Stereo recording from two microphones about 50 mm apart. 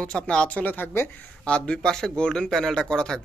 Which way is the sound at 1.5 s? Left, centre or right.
Centre.